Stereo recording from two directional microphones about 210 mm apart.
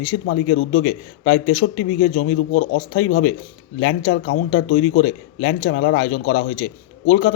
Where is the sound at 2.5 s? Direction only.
60° left (ahead or behind).